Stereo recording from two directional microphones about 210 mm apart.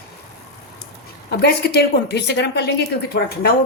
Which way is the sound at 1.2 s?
50° left (ahead or behind).